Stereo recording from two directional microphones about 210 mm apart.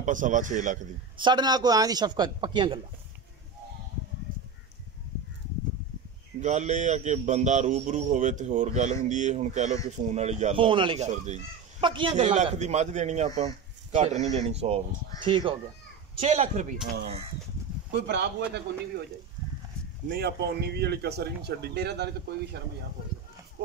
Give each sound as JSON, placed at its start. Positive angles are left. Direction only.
{"t": 0.0, "sound": "a man's voice", "side_deg": -35}
{"t": 1.1, "sound": "speech", "side_deg": -20}
{"t": 6.4, "sound": "a man's voice", "side_deg": -35}
{"t": 11.8, "sound": "a man's voice", "side_deg": -25}
{"t": 17.9, "sound": "a man's voice", "side_deg": -55}
{"t": 20.1, "sound": "a man's voice", "side_deg": -50}